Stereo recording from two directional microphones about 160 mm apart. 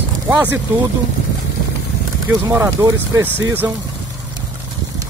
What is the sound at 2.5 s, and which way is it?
Speech, 20° right (ahead or behind).